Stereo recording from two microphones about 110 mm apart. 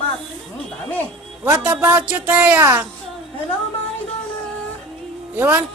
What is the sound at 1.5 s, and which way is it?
A woman's voice, 15° right (ahead or behind).